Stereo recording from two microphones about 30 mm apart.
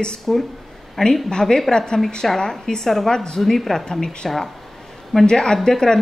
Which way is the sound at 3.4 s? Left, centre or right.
Centre.